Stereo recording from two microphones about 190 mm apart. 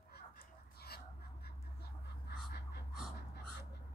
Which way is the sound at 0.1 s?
55° left (ahead or behind).